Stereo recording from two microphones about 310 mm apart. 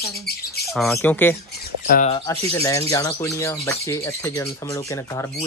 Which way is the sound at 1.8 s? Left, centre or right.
Left.